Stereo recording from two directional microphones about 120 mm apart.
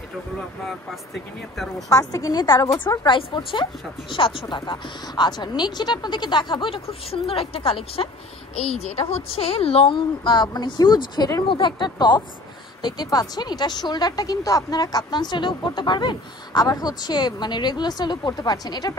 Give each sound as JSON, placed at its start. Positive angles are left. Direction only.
{"t": 1.9, "sound": "a woman's voice", "side_deg": 30}
{"t": 3.1, "sound": "a woman's voice", "side_deg": 40}
{"t": 11.4, "sound": "speech", "side_deg": 45}